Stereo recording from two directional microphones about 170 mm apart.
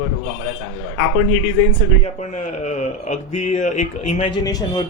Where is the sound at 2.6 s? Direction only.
45° left (ahead or behind).